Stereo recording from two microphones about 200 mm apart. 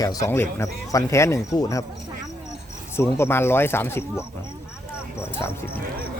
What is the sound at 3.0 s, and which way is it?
Speech, 10° left (ahead or behind).